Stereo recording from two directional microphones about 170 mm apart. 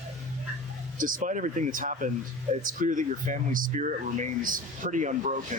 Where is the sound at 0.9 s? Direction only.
55° right (ahead or behind).